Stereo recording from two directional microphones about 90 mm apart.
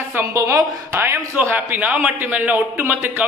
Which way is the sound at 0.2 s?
35° right (ahead or behind).